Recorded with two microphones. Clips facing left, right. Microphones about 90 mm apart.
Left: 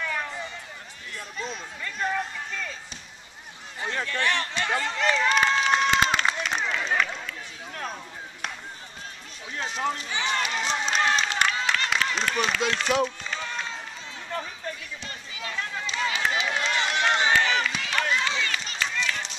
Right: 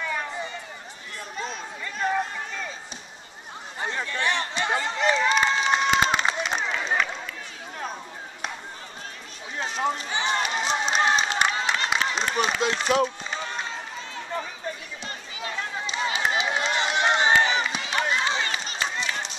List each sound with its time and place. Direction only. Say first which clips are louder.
0.0 s run: right 1 dB; 10° right (ahead or behind)
2.0 s run: right 4 dB; 15° right (ahead or behind)
3.9 s a sound: left 1 dB; 10° right (ahead or behind)
5.3 s crowd: even; 5° right (ahead or behind)
5.9 s a sound: right 1 dB; 15° right (ahead or behind)
9.9 s run: right 2 dB; 30° right (ahead or behind)
11.7 s applause: right 1 dB; 20° right (ahead or behind)
12.3 s speech: right 2 dB; 20° right (ahead or behind)
13.0 s run: right 2 dB; 15° right (ahead or behind)
15.0 s run: right 3 dB; 30° right (ahead or behind)